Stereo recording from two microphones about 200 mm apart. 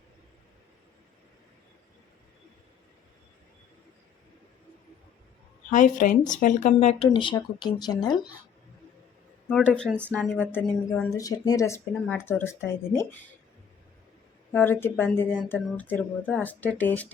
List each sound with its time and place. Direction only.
5.7 s speech: 40° left (ahead or behind); by 8.3 s 20° left (ahead or behind)
9.5 s speech: 5° left (ahead or behind)
14.5 s speech: 10° left (ahead or behind)